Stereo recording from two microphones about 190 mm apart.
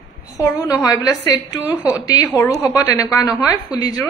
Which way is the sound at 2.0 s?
20° left (ahead or behind).